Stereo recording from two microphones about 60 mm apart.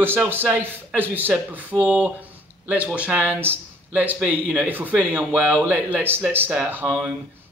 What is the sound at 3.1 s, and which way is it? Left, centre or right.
A man's voice, right.